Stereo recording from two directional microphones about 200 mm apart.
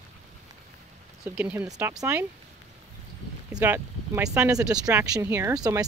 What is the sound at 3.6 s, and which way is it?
Speech, 10° right (ahead or behind).